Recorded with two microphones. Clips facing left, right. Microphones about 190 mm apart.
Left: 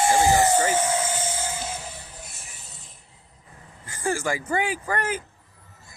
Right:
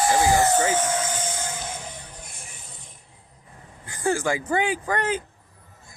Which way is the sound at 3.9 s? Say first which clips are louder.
Right 2 dB; 15° right (ahead or behind).